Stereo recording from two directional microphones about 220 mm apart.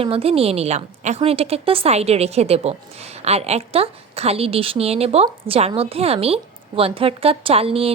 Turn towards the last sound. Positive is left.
turn(degrees=-25)  # may be behind; listen again after turning